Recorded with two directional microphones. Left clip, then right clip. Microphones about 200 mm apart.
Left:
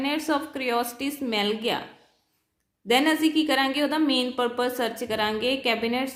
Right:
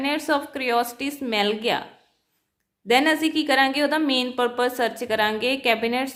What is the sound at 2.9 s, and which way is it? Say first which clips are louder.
A woman's voice: right 2 dB; 15° right (ahead or behind).